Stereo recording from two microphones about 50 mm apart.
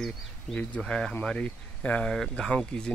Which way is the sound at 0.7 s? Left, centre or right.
Centre.